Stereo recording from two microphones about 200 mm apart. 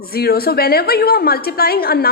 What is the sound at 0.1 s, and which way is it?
A woman's voice, 50° left (ahead or behind).